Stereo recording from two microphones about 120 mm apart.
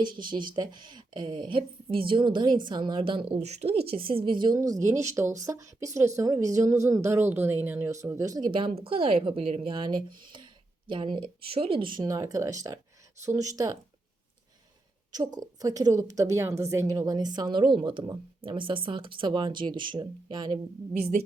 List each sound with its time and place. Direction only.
0.0 s a woman's voice: 40° right (ahead or behind); by 7.9 s 15° right (ahead or behind)
8.0 s a woman's voice: 30° right (ahead or behind)
8.4 s speech: 45° right (ahead or behind)
12.0 s a woman's voice: 25° right (ahead or behind)
15.1 s speech: 35° right (ahead or behind)